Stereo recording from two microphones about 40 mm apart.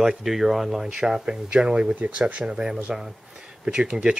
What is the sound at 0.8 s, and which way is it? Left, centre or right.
Speech, centre.